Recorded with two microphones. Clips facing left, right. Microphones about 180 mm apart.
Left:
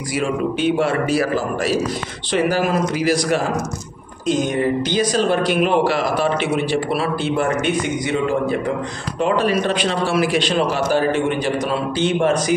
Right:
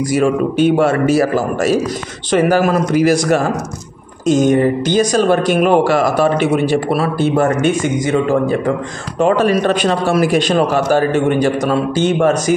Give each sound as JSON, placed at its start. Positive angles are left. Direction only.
{"t": 0.1, "sound": "speech", "side_deg": -45}